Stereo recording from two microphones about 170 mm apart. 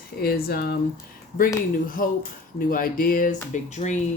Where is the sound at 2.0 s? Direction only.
55° left (ahead or behind).